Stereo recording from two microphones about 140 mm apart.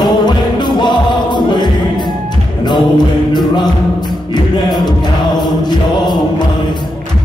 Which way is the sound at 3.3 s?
30° left (ahead or behind).